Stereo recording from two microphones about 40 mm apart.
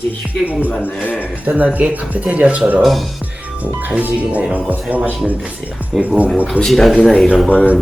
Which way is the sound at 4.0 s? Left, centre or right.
Right.